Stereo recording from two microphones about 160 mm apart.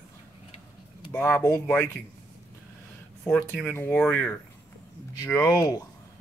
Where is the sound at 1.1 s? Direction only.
15° left (ahead or behind).